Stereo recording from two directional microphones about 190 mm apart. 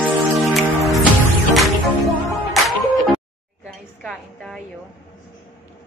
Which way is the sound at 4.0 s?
5° left (ahead or behind).